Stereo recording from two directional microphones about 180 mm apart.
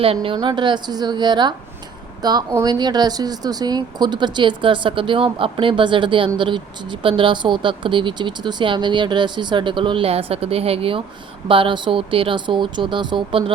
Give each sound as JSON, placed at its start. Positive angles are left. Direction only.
{"t": 0.0, "sound": "a woman's voice", "side_deg": -30}